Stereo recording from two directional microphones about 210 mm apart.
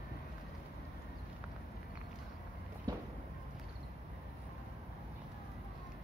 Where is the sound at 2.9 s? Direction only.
20° right (ahead or behind).